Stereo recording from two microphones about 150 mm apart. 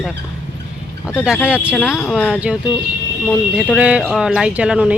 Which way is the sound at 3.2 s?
5° left (ahead or behind).